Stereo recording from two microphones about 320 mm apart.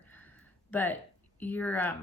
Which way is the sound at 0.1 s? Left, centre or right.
Centre.